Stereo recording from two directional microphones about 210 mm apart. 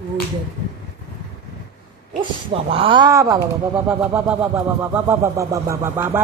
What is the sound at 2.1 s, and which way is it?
Speech, 25° right (ahead or behind).